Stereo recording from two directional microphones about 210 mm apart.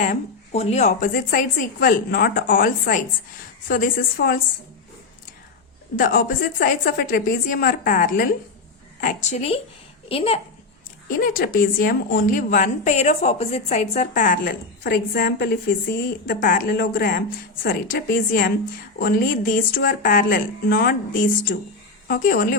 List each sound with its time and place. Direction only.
0.0 s a woman's voice: 35° left (ahead or behind)
6.0 s a woman's voice: 45° left (ahead or behind); by 10.4 s 30° left (ahead or behind)
11.2 s a woman's voice: 45° left (ahead or behind)